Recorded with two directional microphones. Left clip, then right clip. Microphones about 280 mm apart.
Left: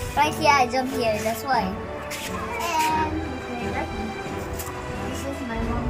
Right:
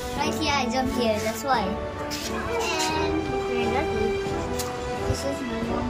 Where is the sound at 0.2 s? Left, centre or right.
Centre.